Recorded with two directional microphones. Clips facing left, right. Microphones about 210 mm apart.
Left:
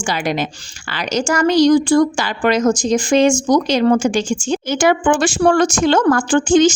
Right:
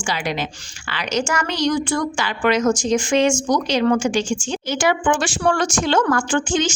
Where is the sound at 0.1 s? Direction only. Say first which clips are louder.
Left 4 dB; 45° left (ahead or behind).